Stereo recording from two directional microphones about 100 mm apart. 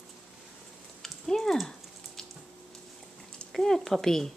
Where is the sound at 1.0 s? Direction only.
5° left (ahead or behind).